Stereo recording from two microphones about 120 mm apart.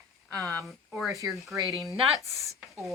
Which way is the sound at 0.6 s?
Centre (ahead or behind).